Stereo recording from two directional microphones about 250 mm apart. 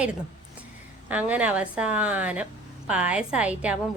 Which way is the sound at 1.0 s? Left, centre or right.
Centre.